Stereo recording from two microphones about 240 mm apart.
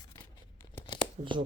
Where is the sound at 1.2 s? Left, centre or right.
Right.